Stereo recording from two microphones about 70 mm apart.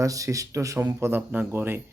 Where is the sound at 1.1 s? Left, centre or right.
Right.